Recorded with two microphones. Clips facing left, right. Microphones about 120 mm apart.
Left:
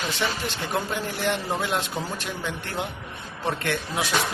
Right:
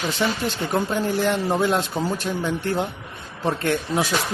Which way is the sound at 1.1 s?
35° right (ahead or behind).